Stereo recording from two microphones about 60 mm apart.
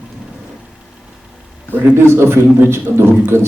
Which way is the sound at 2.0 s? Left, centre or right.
Right.